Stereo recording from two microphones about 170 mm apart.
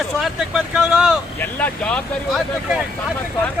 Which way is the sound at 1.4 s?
10° left (ahead or behind).